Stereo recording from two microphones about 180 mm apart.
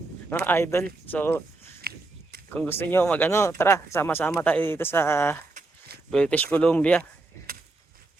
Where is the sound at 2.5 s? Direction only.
10° left (ahead or behind).